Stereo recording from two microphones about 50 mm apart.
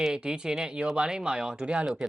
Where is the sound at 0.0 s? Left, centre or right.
Centre.